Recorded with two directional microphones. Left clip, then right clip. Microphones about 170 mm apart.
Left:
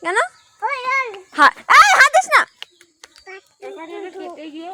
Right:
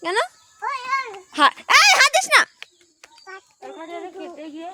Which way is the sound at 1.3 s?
15° right (ahead or behind).